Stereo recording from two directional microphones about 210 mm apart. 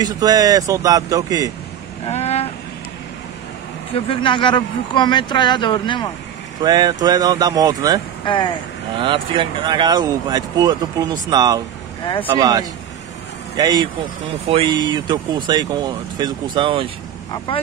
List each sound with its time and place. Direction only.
0.0 s speech: 15° right (ahead or behind)
2.0 s vehicle: 30° left (ahead or behind)
3.9 s speech: 25° left (ahead or behind)
6.6 s speech: 20° right (ahead or behind)
17.5 s speech: 25° left (ahead or behind)